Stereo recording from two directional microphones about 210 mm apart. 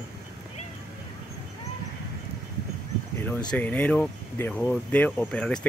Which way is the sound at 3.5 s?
5° left (ahead or behind).